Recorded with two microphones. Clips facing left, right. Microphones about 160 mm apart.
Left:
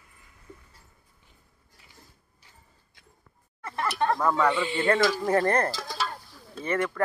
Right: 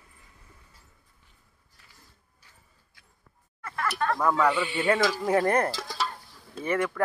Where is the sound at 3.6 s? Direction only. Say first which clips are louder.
Left 2 dB; 25° left (ahead or behind).